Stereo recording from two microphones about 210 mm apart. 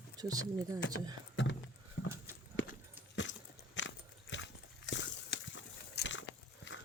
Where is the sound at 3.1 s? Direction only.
60° left (ahead or behind).